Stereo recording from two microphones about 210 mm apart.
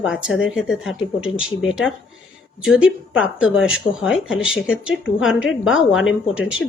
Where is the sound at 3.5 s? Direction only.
75° left (ahead or behind).